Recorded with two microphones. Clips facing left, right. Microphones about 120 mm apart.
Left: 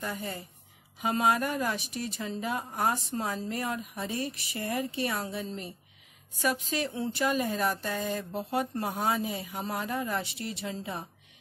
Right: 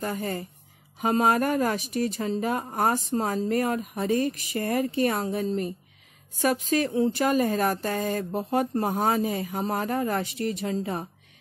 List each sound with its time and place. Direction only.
0.0 s speech: 45° right (ahead or behind)